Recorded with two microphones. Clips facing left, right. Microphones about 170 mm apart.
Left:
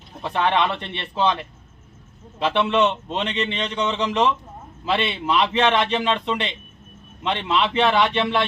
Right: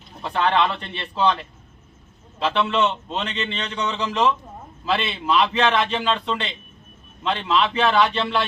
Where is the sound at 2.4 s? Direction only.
20° left (ahead or behind).